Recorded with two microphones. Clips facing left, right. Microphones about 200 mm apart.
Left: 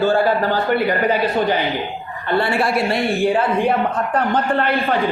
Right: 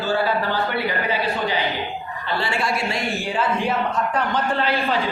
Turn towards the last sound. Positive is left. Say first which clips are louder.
# left 3 dB
turn(degrees=55)  # may be behind; listen again after turning